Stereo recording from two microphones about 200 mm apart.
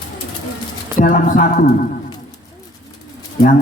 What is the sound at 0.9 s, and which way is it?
Speech, 40° left (ahead or behind).